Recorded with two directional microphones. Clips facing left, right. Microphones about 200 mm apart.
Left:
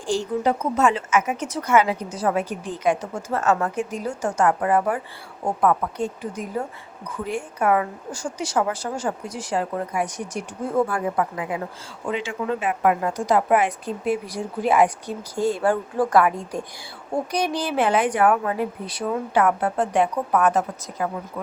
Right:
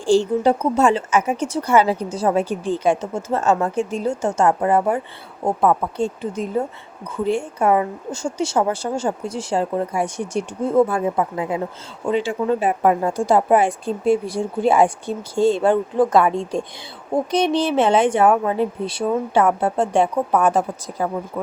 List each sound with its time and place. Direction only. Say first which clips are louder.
0.0 s speech: right 6 dB; 30° right (ahead or behind)